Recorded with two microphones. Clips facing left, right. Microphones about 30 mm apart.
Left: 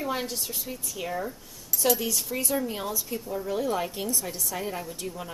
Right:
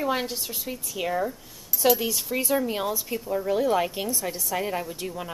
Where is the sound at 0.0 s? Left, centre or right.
Centre.